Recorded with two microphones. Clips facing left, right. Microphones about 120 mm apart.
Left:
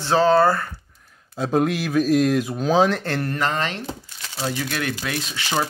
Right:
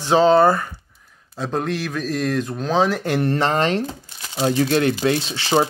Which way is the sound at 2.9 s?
15° right (ahead or behind).